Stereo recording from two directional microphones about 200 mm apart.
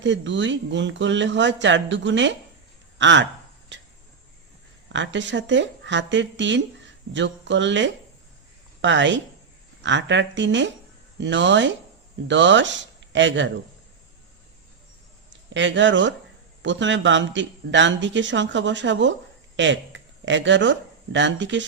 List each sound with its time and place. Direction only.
0.0 s speech: 65° right (ahead or behind)
4.9 s speech: 65° right (ahead or behind)
15.3 s speech: 65° right (ahead or behind)